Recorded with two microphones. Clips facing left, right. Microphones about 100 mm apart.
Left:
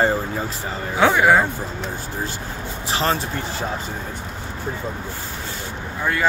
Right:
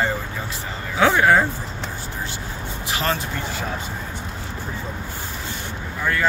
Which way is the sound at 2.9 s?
30° left (ahead or behind).